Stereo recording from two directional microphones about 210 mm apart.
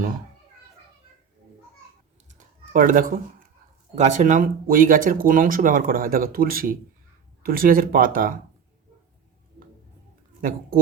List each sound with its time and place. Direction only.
2.7 s speech: 40° right (ahead or behind)